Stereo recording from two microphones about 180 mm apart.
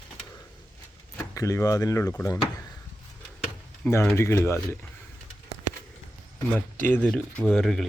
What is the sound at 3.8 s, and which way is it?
Speech, 15° left (ahead or behind).